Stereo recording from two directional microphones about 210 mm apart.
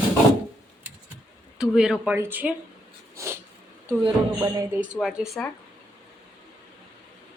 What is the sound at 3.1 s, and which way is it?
Cat, 15° right (ahead or behind).